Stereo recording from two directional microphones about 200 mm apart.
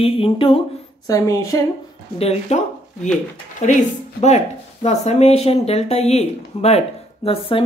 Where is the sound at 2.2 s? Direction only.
30° left (ahead or behind).